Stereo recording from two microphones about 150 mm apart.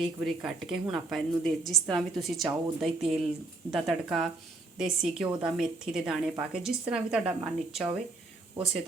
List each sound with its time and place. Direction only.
0.0 s a woman's voice: 5° right (ahead or behind)